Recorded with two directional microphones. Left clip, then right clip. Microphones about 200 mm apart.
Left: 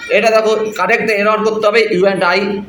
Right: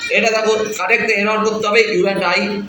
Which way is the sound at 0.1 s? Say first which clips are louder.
Left 4 dB; 60° left (ahead or behind).